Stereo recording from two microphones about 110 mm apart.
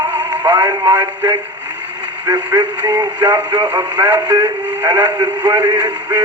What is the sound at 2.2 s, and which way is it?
Speech, 40° right (ahead or behind).